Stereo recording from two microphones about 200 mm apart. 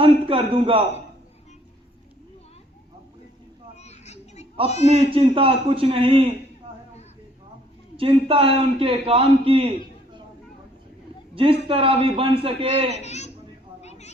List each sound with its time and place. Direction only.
0.0 s a man's voice: 25° right (ahead or behind)
3.8 s children playing: 35° left (ahead or behind)
4.9 s a man's voice: 25° right (ahead or behind)
7.9 s a man's voice: 25° right (ahead or behind)
11.3 s a man's voice: 25° right (ahead or behind)
12.9 s a child's voice: 35° left (ahead or behind)